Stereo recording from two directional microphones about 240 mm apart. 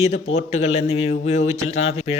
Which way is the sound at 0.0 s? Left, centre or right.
Left.